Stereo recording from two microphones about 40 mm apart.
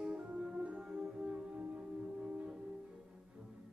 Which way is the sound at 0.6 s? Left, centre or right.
Right.